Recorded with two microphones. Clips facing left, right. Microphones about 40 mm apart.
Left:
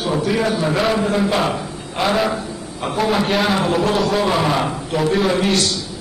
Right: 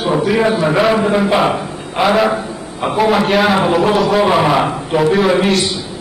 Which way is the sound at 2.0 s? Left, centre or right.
Centre.